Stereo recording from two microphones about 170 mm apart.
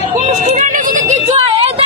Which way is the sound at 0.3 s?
45° right (ahead or behind).